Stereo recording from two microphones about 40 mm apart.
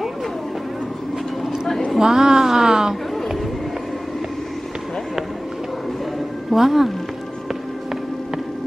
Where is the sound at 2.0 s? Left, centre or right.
Centre.